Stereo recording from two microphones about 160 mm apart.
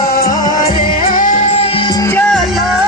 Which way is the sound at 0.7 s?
55° left (ahead or behind).